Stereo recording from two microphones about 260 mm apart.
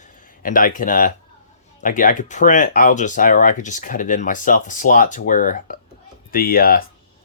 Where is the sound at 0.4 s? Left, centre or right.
Left.